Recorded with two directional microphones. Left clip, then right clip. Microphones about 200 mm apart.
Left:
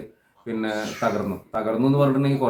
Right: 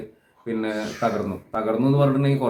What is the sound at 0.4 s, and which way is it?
Speech, centre (ahead or behind).